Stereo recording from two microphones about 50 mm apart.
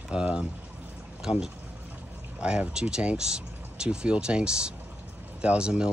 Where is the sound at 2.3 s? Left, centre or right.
Right.